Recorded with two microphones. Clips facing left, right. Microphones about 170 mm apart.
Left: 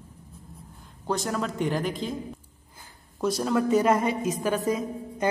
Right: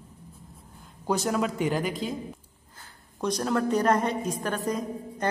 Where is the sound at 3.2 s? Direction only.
5° left (ahead or behind).